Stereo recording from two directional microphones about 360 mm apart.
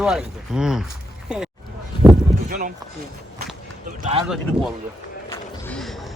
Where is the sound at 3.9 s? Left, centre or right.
Centre.